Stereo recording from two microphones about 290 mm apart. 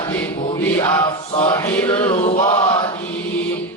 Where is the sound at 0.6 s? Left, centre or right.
Centre.